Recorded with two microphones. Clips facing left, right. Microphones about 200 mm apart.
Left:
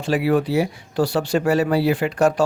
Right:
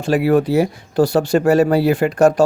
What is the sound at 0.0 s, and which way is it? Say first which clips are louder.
Speech: right 4 dB; 45° right (ahead or behind).